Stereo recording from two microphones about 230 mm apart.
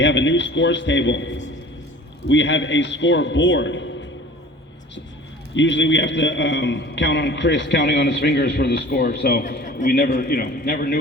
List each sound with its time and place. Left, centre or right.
0.0 s a man's voice: left
5.5 s a man's voice: left